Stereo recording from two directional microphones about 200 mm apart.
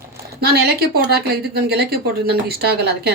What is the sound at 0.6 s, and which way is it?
Speech, 50° right (ahead or behind).